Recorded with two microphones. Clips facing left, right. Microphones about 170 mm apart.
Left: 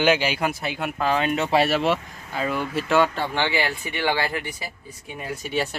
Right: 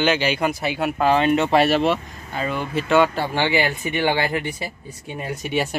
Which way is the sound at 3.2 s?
10° right (ahead or behind).